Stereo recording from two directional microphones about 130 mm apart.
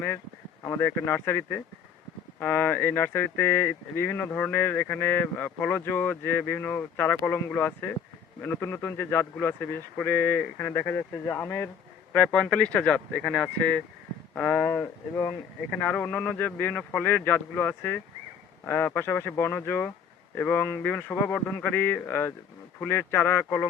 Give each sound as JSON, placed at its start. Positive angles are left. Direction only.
{"t": 0.6, "sound": "speech", "side_deg": 20}